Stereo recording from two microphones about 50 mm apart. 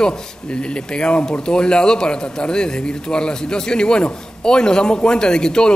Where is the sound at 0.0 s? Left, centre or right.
Centre.